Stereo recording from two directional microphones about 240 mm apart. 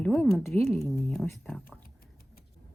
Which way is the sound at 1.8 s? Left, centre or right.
Left.